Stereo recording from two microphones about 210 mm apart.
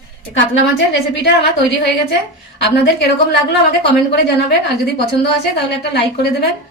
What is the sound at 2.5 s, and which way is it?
A woman's voice, 55° left (ahead or behind).